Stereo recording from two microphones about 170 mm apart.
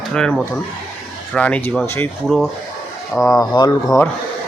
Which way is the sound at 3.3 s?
25° left (ahead or behind).